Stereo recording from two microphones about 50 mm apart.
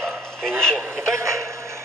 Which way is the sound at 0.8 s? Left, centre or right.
Right.